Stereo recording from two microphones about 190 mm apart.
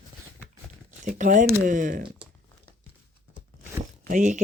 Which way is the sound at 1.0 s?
45° right (ahead or behind).